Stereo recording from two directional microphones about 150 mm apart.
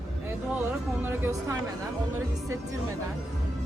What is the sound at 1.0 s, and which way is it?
Speech, 15° right (ahead or behind).